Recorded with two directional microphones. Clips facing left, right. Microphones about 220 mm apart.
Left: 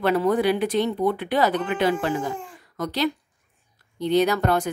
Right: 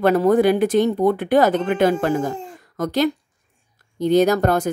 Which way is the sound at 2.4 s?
45° right (ahead or behind).